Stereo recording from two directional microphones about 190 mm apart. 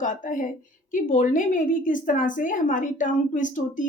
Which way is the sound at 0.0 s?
45° left (ahead or behind).